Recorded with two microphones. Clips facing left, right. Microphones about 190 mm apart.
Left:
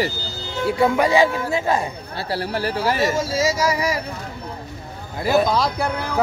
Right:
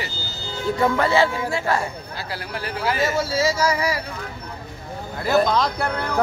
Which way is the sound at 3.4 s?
15° left (ahead or behind).